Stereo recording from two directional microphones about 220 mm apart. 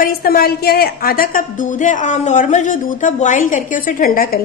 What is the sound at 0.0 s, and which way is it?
A woman's voice, 45° left (ahead or behind).